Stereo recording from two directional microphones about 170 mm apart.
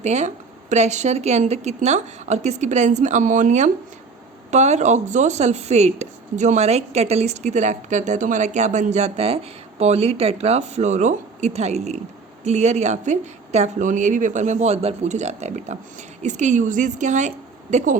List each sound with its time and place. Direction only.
0.0 s a woman's voice: 40° right (ahead or behind)